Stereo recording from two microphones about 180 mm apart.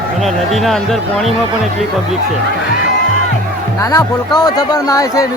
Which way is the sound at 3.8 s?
20° left (ahead or behind).